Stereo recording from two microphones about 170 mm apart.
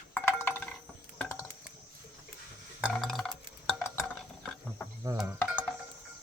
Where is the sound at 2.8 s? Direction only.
Centre (ahead or behind).